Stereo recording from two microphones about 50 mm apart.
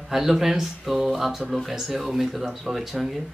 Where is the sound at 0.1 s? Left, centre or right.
Centre.